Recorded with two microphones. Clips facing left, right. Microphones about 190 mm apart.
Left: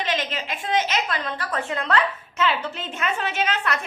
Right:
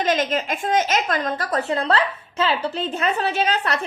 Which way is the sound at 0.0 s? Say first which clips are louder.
Right 6 dB; 45° right (ahead or behind).